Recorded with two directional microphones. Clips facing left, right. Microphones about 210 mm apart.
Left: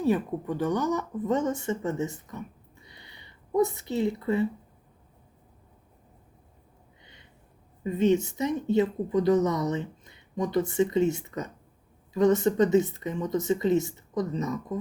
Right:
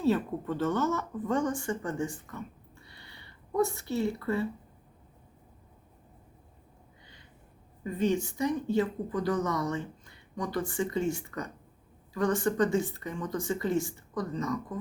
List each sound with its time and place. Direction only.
0.0 s speech: 15° left (ahead or behind)
7.0 s a sound: 20° left (ahead or behind)
7.9 s speech: 20° left (ahead or behind)